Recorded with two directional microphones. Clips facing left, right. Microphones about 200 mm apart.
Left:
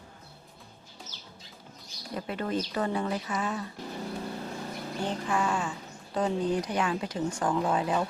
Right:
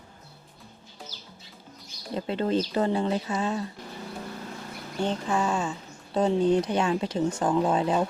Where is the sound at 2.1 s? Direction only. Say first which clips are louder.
Right 5 dB; 25° right (ahead or behind).